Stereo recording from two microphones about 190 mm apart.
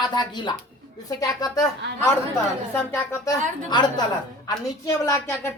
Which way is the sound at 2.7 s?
15° left (ahead or behind).